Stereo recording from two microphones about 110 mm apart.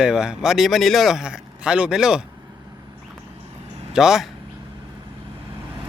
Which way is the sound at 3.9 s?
5° right (ahead or behind).